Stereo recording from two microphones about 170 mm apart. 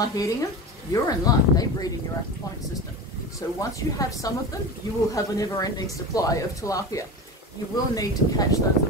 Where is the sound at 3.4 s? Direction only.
20° left (ahead or behind).